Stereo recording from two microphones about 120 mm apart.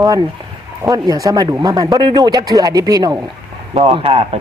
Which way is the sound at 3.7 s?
50° right (ahead or behind).